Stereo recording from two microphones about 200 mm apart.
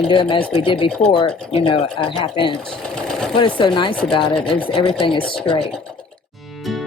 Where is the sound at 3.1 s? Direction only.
5° left (ahead or behind).